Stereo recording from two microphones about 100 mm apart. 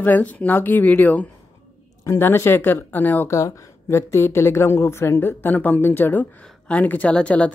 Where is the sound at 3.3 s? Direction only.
35° left (ahead or behind).